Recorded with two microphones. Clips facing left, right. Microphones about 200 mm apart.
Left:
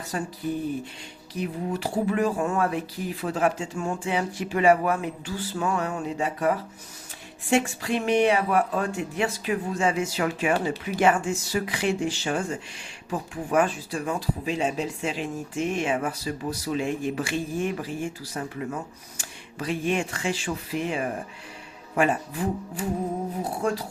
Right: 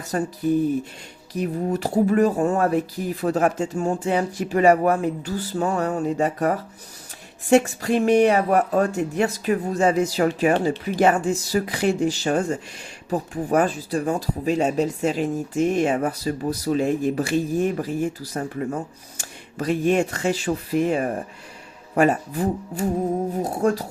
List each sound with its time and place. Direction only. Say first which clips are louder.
0.1 s speech: right 6 dB; 45° right (ahead or behind)
1.4 s speech: right 5 dB; 45° right (ahead or behind)